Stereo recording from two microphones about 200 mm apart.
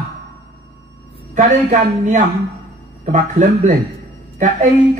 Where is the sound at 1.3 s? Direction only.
35° right (ahead or behind).